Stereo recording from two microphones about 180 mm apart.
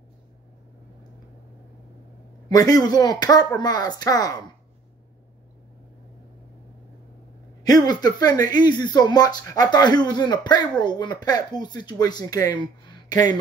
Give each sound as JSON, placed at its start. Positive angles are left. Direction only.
{"t": 2.5, "sound": "speech", "side_deg": 20}
{"t": 7.6, "sound": "speech", "side_deg": 20}